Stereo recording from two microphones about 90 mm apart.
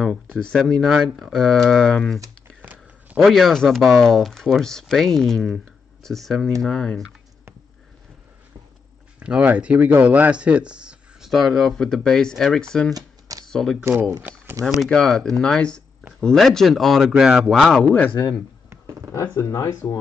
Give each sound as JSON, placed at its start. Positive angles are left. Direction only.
{"t": 0.3, "sound": "speech", "side_deg": 10}
{"t": 2.6, "sound": "a sound", "side_deg": -20}
{"t": 3.2, "sound": "speech", "side_deg": 0}
{"t": 9.2, "sound": "speech", "side_deg": -15}
{"t": 12.9, "sound": "a sound", "side_deg": -45}
{"t": 13.5, "sound": "speech", "side_deg": 5}
{"t": 14.4, "sound": "a sound", "side_deg": -30}
{"t": 14.8, "sound": "speech", "side_deg": 5}
{"t": 19.1, "sound": "speech", "side_deg": 35}